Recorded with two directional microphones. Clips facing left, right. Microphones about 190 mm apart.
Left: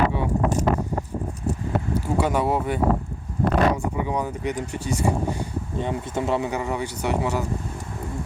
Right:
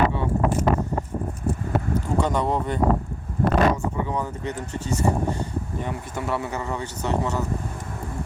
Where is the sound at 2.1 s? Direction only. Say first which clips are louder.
Left 1 dB; 10° left (ahead or behind).